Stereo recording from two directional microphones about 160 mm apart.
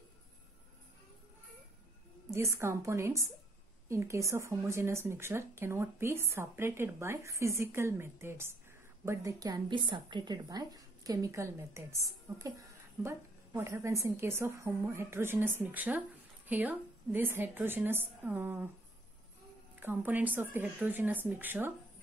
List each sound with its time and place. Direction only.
2.3 s a woman's voice: 15° right (ahead or behind)
19.7 s a woman's voice: 10° right (ahead or behind)